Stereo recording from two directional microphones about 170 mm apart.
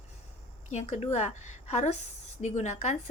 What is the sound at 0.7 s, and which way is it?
A woman's voice, 40° left (ahead or behind).